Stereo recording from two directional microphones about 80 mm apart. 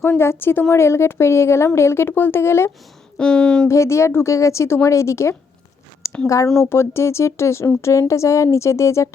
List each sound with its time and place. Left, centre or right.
0.0 s a woman's voice: left
3.2 s speech: centre
3.7 s speech: left
6.6 s speech: left